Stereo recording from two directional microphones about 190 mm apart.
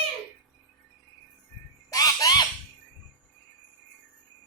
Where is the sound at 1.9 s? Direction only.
20° left (ahead or behind).